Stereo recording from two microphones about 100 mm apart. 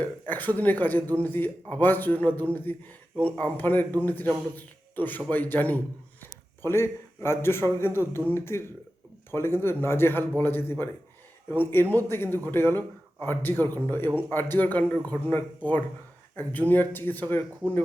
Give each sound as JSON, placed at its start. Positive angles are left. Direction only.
{"t": 0.0, "sound": "a man's voice", "side_deg": 15}